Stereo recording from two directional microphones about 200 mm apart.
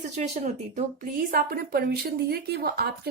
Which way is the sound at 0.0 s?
35° right (ahead or behind).